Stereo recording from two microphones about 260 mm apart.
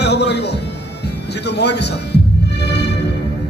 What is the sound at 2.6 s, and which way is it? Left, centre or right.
Music, left.